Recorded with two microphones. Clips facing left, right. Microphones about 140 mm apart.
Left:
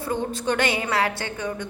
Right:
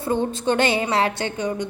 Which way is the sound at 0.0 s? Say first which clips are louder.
Right 4 dB; 25° right (ahead or behind).